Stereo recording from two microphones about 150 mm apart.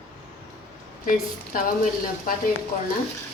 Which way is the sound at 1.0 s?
70° left (ahead or behind).